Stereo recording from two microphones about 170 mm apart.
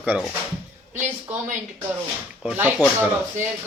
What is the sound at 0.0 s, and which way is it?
Speech, 5° right (ahead or behind).